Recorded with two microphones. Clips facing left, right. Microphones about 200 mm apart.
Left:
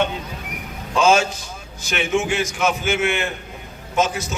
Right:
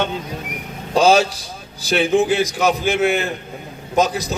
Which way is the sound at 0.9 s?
35° right (ahead or behind).